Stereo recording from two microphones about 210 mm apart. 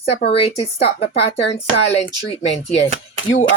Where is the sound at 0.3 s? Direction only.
25° left (ahead or behind).